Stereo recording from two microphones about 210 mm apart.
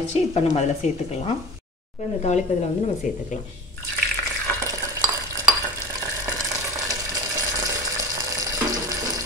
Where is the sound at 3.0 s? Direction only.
35° left (ahead or behind).